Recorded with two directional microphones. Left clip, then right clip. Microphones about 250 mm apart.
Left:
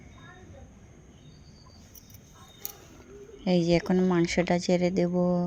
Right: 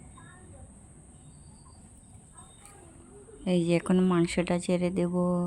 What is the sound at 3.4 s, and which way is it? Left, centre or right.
Speech, centre.